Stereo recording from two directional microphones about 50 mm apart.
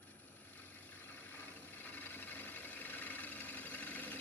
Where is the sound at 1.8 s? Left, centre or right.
Left.